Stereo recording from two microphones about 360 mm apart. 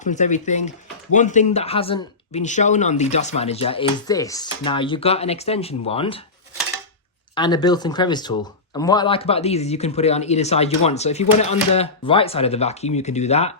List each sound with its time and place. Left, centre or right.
0.0 s speech: centre
7.3 s speech: centre